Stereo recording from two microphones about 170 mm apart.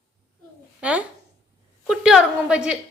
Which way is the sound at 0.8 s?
5° right (ahead or behind).